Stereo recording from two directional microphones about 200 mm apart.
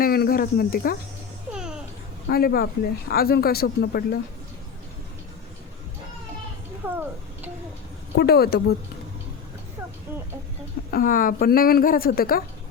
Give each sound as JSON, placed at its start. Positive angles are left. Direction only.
{"t": 0.0, "sound": "speech", "side_deg": 50}
{"t": 1.5, "sound": "babbling", "side_deg": -5}
{"t": 2.3, "sound": "speech", "side_deg": 50}
{"t": 6.8, "sound": "speech", "side_deg": -10}
{"t": 8.2, "sound": "speech", "side_deg": 50}
{"t": 10.9, "sound": "speech", "side_deg": 45}